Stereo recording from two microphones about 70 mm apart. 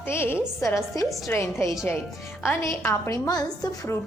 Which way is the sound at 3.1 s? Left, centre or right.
Left.